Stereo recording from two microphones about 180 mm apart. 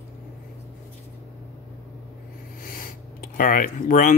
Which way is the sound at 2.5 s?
50° left (ahead or behind).